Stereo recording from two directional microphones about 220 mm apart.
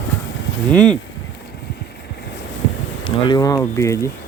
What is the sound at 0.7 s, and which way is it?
Speech, 5° left (ahead or behind).